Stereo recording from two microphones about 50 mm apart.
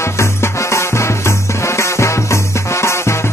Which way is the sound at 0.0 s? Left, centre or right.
Left.